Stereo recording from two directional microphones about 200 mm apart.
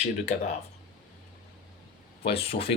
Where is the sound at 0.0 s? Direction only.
35° left (ahead or behind).